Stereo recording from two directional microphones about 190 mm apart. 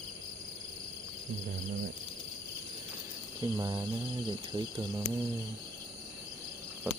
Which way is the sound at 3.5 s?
20° right (ahead or behind).